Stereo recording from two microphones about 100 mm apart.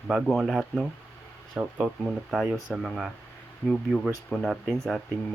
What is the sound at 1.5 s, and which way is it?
Speech, 15° right (ahead or behind).